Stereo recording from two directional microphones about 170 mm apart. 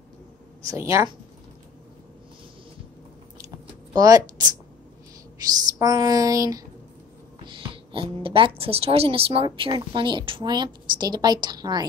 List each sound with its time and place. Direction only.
0.7 s speech: 15° right (ahead or behind)
3.9 s speech: 20° right (ahead or behind)
5.8 s a woman's voice: 20° right (ahead or behind)
7.4 s a woman's voice: 30° right (ahead or behind)